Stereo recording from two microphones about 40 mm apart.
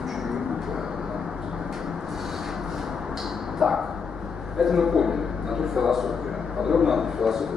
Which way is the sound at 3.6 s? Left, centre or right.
Centre.